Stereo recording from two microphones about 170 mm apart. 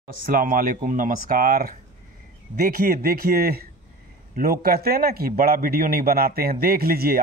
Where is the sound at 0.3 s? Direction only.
55° right (ahead or behind).